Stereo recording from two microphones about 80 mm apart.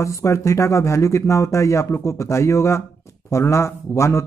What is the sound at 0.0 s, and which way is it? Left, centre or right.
Speech, left.